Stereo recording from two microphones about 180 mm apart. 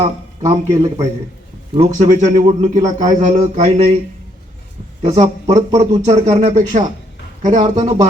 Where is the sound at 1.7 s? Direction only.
35° right (ahead or behind).